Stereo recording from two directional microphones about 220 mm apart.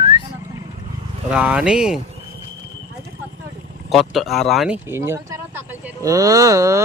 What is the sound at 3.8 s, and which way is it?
Speech, centre (ahead or behind).